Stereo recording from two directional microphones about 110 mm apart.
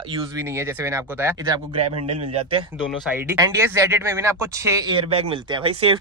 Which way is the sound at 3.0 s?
15° right (ahead or behind).